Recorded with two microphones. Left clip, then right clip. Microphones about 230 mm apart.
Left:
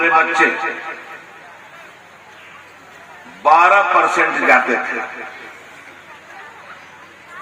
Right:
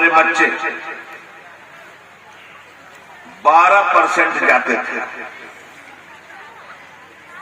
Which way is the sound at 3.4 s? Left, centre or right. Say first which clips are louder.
Even; right.